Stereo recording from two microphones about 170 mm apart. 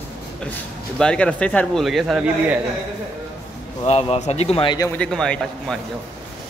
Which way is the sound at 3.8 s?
35° left (ahead or behind).